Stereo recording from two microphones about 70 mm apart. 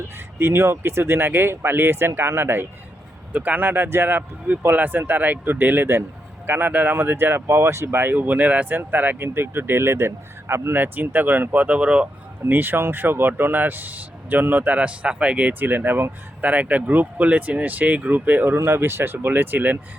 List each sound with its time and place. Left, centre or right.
0.3 s speech: right
3.3 s speech: right
12.4 s speech: right
18.5 s speech: right